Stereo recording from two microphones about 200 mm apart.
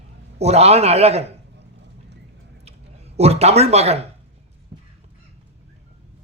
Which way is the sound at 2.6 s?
30° right (ahead or behind).